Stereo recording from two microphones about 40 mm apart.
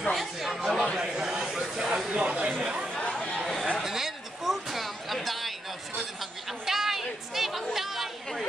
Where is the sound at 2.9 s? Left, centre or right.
Left.